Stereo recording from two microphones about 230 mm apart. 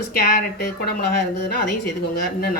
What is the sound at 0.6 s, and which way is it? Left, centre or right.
Speech, left.